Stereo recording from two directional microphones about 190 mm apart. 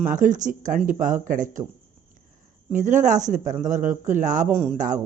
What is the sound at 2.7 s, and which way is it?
Speech, 40° right (ahead or behind).